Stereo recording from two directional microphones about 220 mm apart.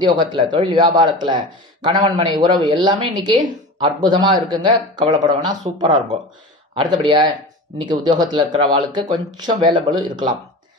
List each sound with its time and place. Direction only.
0.0 s speech: 20° right (ahead or behind)